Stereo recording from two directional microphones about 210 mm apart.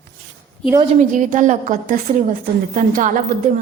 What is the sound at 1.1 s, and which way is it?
A woman's voice, 35° right (ahead or behind).